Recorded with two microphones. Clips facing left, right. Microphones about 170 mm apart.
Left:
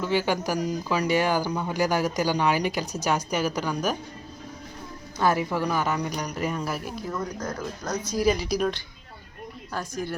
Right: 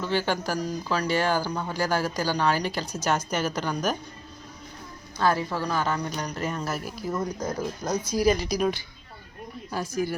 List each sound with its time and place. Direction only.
0.0 s speech: 10° left (ahead or behind)
5.1 s speech: 15° left (ahead or behind)
6.7 s speech: 5° right (ahead or behind)
8.2 s speech: 5° left (ahead or behind)